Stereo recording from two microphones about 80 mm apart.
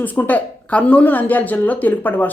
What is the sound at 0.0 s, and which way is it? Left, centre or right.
Speech, left.